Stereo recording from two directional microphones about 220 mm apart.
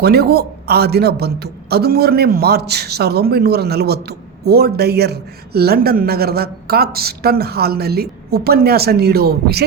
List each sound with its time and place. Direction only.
0.0 s speech: 45° right (ahead or behind)